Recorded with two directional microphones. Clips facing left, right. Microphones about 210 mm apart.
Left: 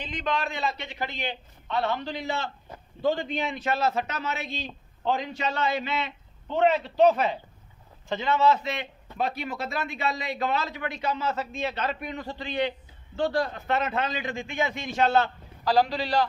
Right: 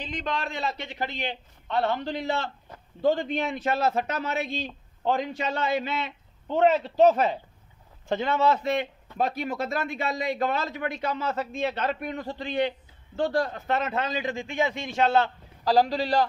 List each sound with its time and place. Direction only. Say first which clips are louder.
0.0 s speech: left 1 dB; 40° right (ahead or behind)
1.7 s a man's voice: right 2 dB; 50° right (ahead or behind); by 15.2 s 25° right (ahead or behind)
15.6 s a man's voice: right 1 dB; 40° right (ahead or behind)